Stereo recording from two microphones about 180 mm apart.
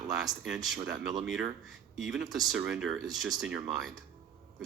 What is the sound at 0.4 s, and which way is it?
Speech, 5° right (ahead or behind).